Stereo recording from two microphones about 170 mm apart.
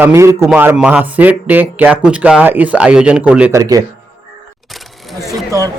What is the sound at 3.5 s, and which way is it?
Speech, 20° right (ahead or behind).